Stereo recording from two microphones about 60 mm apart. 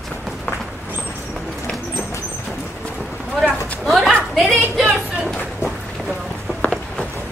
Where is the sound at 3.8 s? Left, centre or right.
Centre.